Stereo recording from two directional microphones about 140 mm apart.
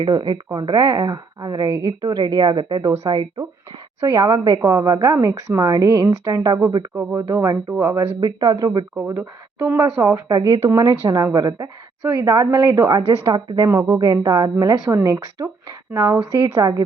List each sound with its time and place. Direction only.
0.0 s speech: 35° right (ahead or behind)
2.8 s a woman's voice: 20° right (ahead or behind)
9.0 s a woman's voice: 15° right (ahead or behind)
13.0 s speech: 40° right (ahead or behind)
13.7 s a woman's voice: 20° right (ahead or behind)